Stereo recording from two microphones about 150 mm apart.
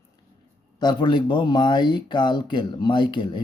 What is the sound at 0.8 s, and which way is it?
Speech, 30° left (ahead or behind).